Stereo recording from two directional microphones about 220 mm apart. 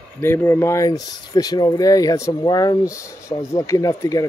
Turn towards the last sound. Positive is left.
turn(degrees=15)  # may be behind; listen again after turning